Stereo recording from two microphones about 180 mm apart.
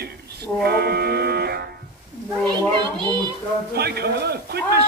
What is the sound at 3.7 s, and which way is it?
A man's voice, 60° right (ahead or behind).